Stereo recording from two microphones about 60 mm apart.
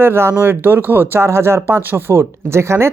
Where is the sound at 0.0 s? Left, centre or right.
Right.